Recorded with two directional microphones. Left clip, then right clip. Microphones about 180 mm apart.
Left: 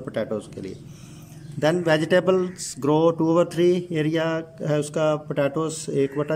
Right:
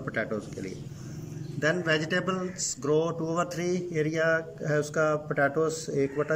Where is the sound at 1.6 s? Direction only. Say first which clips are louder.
Left 6 dB; 35° left (ahead or behind).